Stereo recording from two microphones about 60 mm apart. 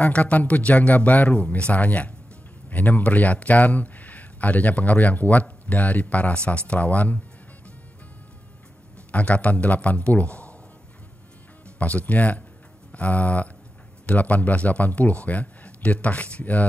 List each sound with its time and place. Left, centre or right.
0.0 s a man's voice: left
9.1 s a man's voice: left
11.6 s a man's voice: left